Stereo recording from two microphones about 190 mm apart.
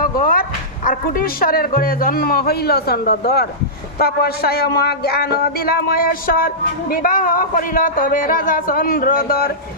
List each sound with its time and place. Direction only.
0.0 s speech: 50° left (ahead or behind)